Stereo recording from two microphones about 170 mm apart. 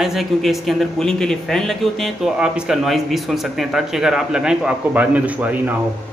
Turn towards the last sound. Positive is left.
turn(degrees=-10)  # may be behind; listen again after turning